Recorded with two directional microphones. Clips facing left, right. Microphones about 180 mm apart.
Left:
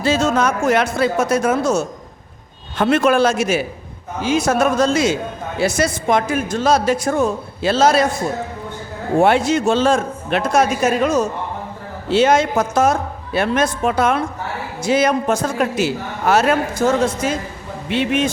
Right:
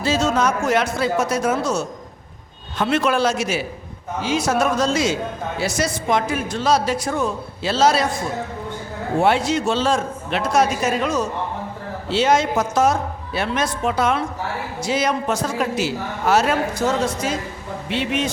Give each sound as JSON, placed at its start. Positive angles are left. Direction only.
{"t": 0.0, "sound": "a man's voice", "side_deg": 55}
{"t": 9.1, "sound": "a man's voice", "side_deg": 50}